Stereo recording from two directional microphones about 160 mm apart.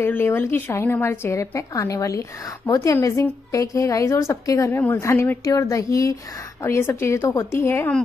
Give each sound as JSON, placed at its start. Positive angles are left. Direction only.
{"t": 0.0, "sound": "a woman's voice", "side_deg": 15}